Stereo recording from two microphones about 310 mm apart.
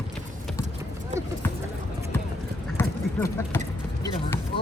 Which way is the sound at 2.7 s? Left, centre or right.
Centre.